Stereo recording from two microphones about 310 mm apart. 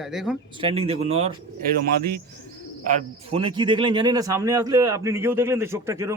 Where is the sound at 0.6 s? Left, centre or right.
Centre.